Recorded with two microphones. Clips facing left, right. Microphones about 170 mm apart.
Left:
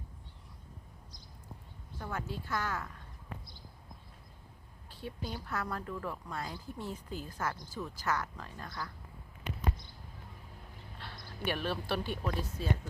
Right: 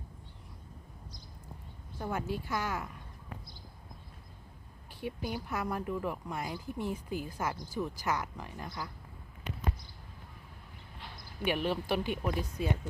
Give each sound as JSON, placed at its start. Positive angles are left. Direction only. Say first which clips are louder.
{"t": 2.0, "sound": "speech", "louder": "right 5 dB", "side_deg": -15}
{"t": 4.9, "sound": "speech", "louder": "right 4 dB", "side_deg": -15}
{"t": 11.0, "sound": "speech", "louder": "right 3 dB", "side_deg": -15}